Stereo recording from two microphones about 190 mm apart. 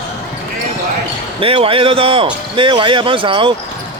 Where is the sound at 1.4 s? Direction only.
30° right (ahead or behind).